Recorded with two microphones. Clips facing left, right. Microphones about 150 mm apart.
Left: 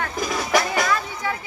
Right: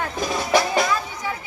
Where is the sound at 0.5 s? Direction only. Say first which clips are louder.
Right 1 dB; 25° right (ahead or behind).